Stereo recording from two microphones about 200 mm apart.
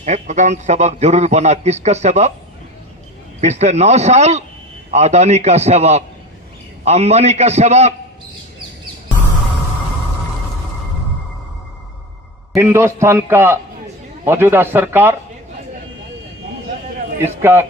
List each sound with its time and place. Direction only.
0.0 s a man's voice: 35° right (ahead or behind)
3.4 s a man's voice: 35° right (ahead or behind)
12.5 s a man's voice: 15° right (ahead or behind)
17.4 s a man's voice: 10° right (ahead or behind)